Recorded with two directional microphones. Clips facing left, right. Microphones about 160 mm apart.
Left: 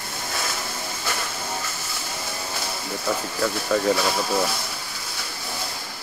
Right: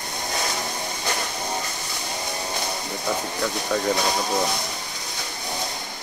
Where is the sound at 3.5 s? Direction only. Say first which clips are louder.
Left 2 dB; 20° right (ahead or behind).